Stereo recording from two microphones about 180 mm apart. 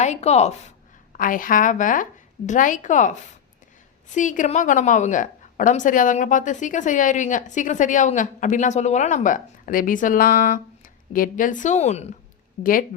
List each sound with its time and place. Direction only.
0.0 s speech: 40° left (ahead or behind)
1.1 s a woman's voice: 50° left (ahead or behind)
4.1 s a woman's voice: 45° left (ahead or behind)